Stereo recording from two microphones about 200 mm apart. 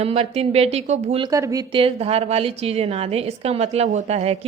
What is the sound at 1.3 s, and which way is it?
A woman's voice, 15° right (ahead or behind).